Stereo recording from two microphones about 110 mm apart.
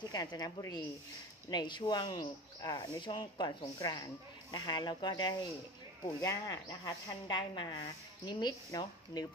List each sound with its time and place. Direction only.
0.0 s speech: 40° left (ahead or behind)